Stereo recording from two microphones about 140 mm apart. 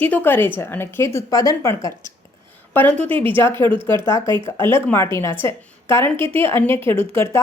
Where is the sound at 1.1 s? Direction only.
25° left (ahead or behind).